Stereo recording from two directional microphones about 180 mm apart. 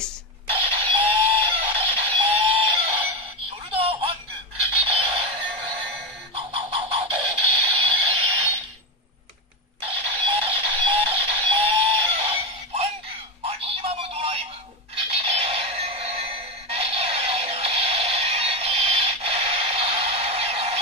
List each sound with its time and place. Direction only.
0.5 s music: 30° right (ahead or behind)
3.7 s telephone: 30° right (ahead or behind)
4.6 s music: 30° right (ahead or behind)
10.2 s music: 30° right (ahead or behind)